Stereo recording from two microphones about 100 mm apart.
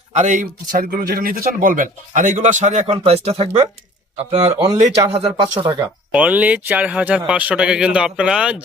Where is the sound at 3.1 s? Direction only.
85° right.